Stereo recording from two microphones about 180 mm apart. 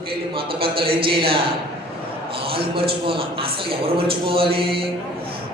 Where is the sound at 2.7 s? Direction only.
30° right (ahead or behind).